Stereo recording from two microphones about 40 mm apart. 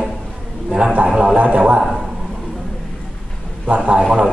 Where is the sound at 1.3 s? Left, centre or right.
Right.